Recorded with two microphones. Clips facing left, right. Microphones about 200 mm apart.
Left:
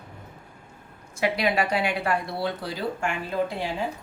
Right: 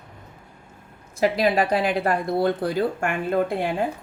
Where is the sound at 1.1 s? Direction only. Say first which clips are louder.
Right 4 dB; 40° right (ahead or behind); by 3.9 s 55° right (ahead or behind).